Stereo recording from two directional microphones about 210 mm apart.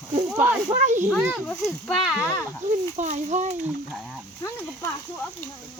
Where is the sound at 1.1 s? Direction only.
Centre (ahead or behind).